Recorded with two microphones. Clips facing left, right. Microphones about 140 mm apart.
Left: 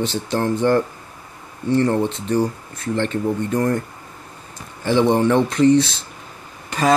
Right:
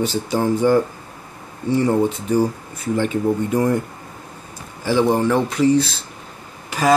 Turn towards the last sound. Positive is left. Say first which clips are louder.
# right 1 dB
turn(degrees=-5)  # may be behind; listen again after turning